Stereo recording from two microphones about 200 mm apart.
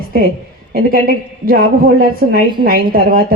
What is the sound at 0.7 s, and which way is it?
Speech, 45° right (ahead or behind).